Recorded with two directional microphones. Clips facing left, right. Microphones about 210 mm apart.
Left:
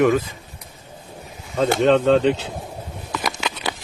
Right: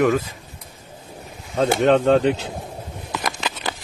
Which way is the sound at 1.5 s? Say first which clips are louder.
Even; centre (ahead or behind).